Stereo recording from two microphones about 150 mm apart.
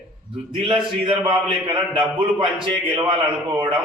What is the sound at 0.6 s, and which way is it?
A man's voice, 35° right (ahead or behind).